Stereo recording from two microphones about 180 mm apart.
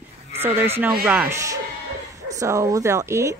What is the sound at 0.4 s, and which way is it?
A woman's voice, 10° right (ahead or behind).